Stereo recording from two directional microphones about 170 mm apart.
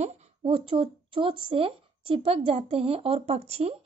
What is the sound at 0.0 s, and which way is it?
A woman's voice, 35° right (ahead or behind).